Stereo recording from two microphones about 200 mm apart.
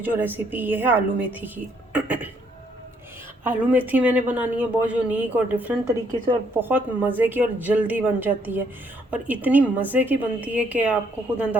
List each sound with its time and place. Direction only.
0.0 s speech: 10° right (ahead or behind)
1.9 s a sound: 10° right (ahead or behind)
3.4 s speech: 10° right (ahead or behind)